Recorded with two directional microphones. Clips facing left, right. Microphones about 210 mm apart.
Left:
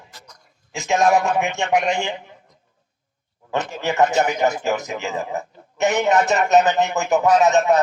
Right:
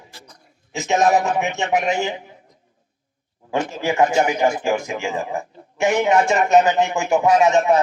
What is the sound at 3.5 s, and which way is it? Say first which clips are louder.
Speech: right 2 dB; 10° right (ahead or behind).